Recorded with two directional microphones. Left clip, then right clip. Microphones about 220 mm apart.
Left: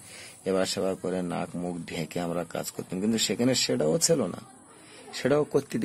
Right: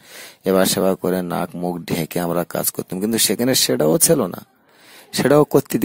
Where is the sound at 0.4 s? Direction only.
45° right (ahead or behind).